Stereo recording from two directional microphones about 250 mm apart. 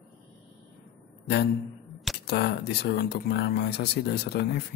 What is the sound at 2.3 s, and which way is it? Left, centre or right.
Speech, left.